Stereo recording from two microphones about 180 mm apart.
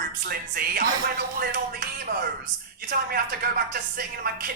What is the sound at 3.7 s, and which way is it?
Speech, 55° right (ahead or behind).